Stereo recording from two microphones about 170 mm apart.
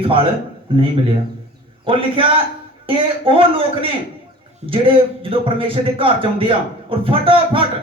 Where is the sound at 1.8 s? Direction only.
30° right (ahead or behind).